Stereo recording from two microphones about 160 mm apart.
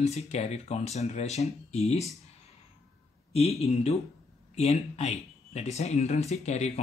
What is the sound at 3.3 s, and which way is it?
Speech, 40° left (ahead or behind).